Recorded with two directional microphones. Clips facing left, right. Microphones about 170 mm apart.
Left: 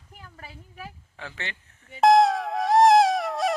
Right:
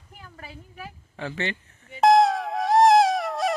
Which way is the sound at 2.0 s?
Centre (ahead or behind).